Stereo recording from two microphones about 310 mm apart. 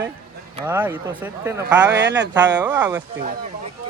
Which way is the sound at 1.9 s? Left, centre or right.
Right.